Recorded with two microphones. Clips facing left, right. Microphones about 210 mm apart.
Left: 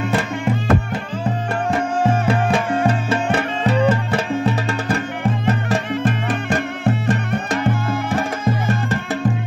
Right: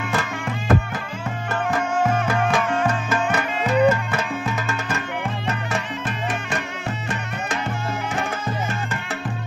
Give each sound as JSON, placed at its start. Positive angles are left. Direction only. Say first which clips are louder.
{"t": 1.2, "sound": "music", "louder": "left 3 dB", "side_deg": 30}